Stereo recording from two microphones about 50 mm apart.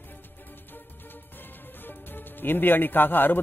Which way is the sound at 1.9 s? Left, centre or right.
Left.